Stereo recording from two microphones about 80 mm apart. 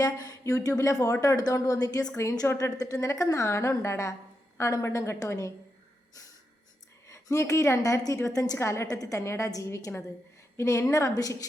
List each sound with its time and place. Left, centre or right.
0.4 s a woman's voice: left
7.1 s a woman's voice: left
8.5 s a woman's voice: left
11.1 s a woman's voice: left